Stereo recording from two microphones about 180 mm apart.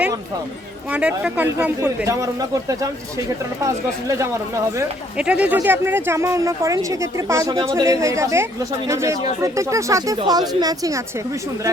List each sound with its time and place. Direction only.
0.9 s a man's voice: 5° right (ahead or behind)
4.1 s a man's voice: 15° right (ahead or behind)